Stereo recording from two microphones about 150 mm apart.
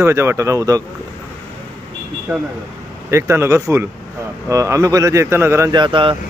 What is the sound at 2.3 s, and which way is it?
Speech, 15° right (ahead or behind).